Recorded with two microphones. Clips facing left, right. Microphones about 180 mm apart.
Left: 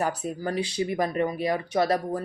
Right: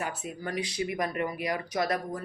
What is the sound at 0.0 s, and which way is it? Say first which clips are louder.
Speech: left 7 dB; 40° left (ahead or behind).